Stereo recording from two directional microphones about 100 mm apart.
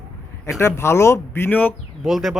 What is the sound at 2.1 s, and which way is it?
Speech, centre (ahead or behind).